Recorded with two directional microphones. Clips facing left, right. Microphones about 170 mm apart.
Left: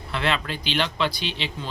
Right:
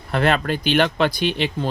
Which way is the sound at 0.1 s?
50° right (ahead or behind).